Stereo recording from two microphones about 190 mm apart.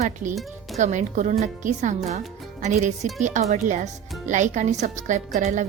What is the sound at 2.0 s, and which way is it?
Music, 35° right (ahead or behind).